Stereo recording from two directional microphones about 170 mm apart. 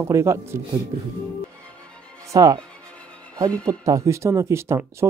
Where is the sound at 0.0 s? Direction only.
15° right (ahead or behind).